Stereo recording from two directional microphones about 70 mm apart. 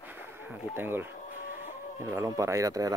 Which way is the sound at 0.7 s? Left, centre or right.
Right.